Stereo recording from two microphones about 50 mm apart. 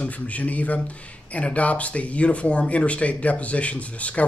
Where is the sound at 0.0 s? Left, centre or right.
Left.